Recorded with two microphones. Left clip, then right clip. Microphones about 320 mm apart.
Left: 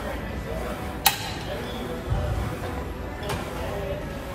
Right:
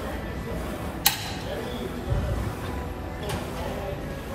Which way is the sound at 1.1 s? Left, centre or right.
Centre.